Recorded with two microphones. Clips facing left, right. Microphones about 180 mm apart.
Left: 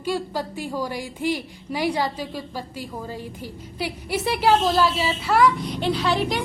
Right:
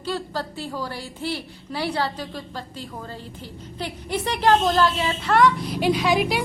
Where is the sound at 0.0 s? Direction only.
15° left (ahead or behind).